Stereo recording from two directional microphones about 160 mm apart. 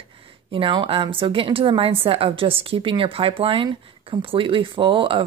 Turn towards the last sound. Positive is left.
turn(degrees=-35)  # may be behind; listen again after turning